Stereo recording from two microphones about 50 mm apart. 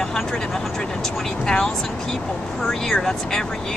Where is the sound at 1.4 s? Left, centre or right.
Centre.